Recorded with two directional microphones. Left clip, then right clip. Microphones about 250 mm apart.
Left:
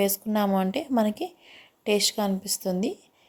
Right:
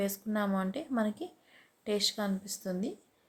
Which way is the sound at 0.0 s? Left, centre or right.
Left.